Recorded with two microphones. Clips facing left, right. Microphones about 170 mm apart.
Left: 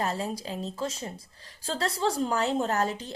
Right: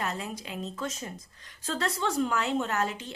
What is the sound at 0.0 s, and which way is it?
Speech, 35° left (ahead or behind).